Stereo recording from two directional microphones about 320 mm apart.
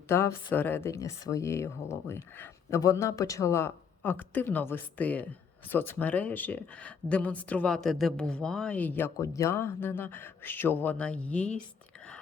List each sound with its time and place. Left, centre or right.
0.1 s speech: centre